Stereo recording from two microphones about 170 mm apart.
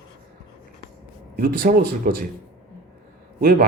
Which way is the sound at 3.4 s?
65° right (ahead or behind).